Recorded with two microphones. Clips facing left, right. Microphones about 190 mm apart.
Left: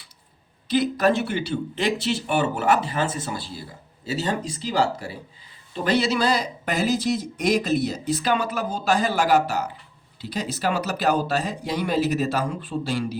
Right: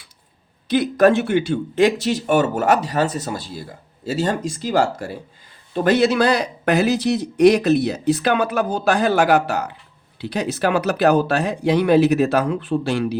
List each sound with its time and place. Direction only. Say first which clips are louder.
0.7 s speech: right 5 dB; 50° right (ahead or behind)